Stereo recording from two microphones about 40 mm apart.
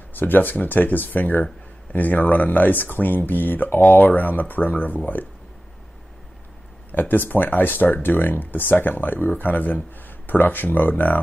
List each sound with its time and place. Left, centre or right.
0.1 s speech: left
6.9 s speech: left